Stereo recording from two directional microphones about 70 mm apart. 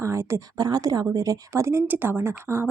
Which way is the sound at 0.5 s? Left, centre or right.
Right.